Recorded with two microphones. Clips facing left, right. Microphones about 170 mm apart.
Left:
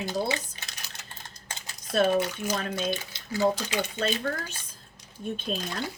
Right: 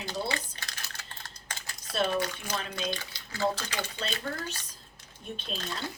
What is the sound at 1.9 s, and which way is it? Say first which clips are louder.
Speech: left 6 dB; 50° left (ahead or behind).